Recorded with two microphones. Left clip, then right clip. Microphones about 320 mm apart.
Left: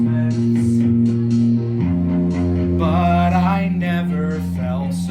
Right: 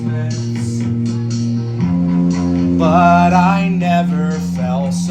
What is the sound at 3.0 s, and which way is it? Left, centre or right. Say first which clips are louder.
Mantra: right 9 dB; centre.